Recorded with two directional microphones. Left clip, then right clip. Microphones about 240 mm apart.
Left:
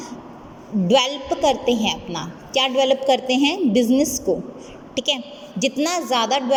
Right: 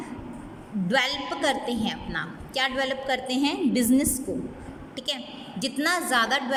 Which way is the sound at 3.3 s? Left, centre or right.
Centre.